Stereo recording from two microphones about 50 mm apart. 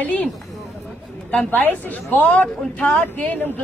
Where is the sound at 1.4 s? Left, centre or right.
Left.